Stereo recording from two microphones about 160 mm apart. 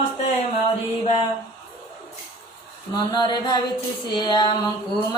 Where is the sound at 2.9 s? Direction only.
25° left (ahead or behind).